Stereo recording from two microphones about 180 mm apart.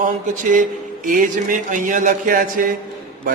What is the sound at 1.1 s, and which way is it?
A man's voice, 50° right (ahead or behind).